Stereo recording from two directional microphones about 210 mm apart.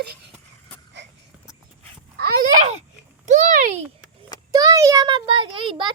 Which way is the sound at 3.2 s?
35° right (ahead or behind).